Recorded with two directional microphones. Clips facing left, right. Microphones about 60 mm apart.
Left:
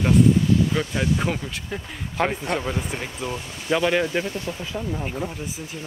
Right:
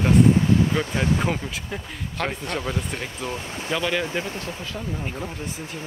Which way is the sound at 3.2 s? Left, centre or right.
Left.